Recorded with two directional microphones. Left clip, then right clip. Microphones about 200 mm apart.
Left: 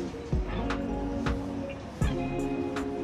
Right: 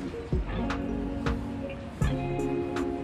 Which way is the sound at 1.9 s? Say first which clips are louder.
Even; centre (ahead or behind).